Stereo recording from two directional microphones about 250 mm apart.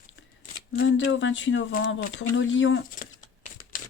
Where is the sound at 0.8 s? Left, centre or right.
Left.